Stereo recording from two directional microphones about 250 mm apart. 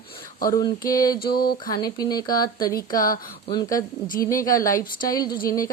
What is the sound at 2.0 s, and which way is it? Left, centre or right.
A woman's voice, centre.